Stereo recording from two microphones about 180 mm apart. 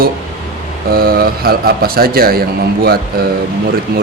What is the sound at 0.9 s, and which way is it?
Speech, 55° right (ahead or behind).